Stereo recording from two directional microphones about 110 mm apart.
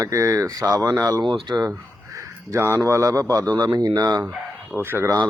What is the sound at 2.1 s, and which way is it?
A man's voice, 25° right (ahead or behind).